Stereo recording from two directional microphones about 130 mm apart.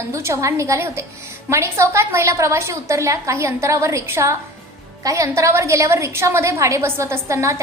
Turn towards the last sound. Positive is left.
turn(degrees=-25)  # may be behind; listen again after turning